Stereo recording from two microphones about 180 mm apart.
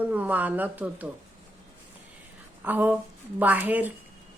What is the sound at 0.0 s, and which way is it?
Speech, 10° right (ahead or behind).